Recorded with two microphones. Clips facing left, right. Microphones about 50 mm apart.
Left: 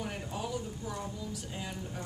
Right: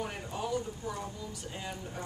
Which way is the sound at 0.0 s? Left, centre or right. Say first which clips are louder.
Right 1 dB; centre.